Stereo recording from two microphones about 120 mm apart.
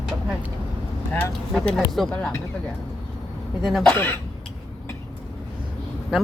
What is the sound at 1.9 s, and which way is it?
Speech, 5° left (ahead or behind).